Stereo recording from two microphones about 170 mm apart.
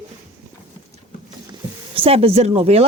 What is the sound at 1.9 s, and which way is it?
Speech, 35° right (ahead or behind).